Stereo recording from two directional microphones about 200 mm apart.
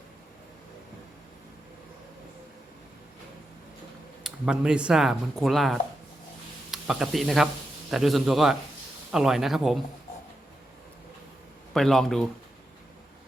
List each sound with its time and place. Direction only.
4.2 s a man's voice: 5° right (ahead or behind)
11.7 s speech: centre (ahead or behind)